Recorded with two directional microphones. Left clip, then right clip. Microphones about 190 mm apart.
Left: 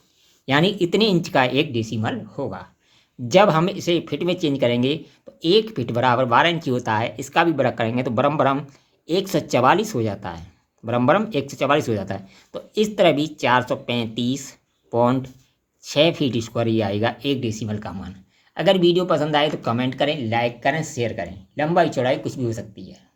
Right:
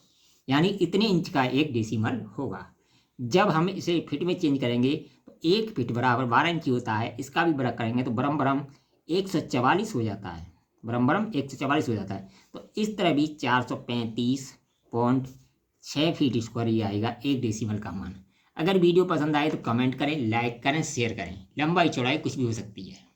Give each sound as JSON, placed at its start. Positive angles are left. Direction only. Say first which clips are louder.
{"t": 0.4, "sound": "speech", "louder": "left 6 dB", "side_deg": 35}